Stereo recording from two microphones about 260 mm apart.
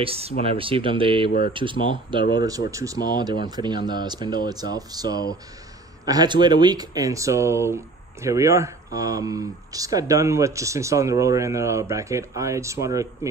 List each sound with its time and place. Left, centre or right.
0.0 s speech: right